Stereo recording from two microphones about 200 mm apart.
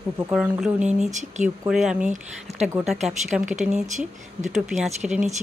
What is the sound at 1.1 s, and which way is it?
Speech, 35° right (ahead or behind).